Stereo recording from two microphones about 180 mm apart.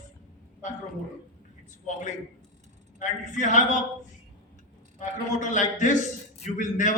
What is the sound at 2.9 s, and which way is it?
Speech, 45° left (ahead or behind).